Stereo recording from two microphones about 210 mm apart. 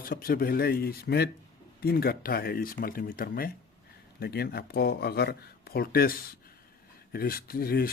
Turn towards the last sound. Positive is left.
turn(degrees=45)  # may be behind; listen again after turning